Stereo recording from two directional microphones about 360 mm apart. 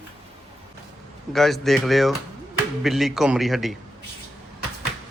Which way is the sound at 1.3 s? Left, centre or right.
Centre.